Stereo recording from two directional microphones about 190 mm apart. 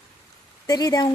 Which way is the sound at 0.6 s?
20° left (ahead or behind).